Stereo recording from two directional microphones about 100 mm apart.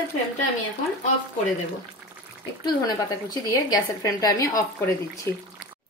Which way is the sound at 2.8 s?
40° left (ahead or behind).